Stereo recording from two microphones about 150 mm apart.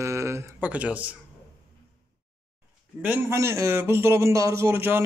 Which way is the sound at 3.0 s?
10° right (ahead or behind).